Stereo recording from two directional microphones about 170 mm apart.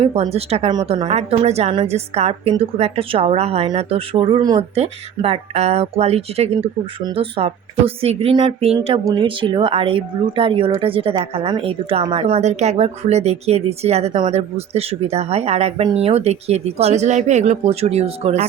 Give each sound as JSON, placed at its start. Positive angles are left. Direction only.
{"t": 0.0, "sound": "a woman's voice", "side_deg": -35}
{"t": 4.7, "sound": "a woman's voice", "side_deg": -35}